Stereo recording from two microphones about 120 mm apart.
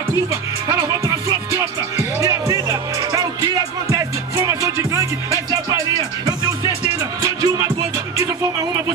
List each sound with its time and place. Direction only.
0.3 s music: 25° right (ahead or behind)